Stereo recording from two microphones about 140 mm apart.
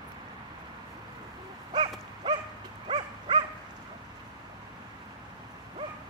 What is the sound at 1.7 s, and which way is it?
Dog, 35° right (ahead or behind).